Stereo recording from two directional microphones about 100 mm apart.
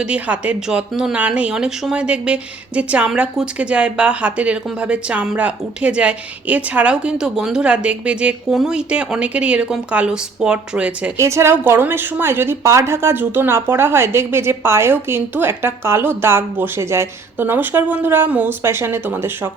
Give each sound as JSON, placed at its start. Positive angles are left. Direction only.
{"t": 0.0, "sound": "speech", "side_deg": -15}
{"t": 11.2, "sound": "a woman's voice", "side_deg": -30}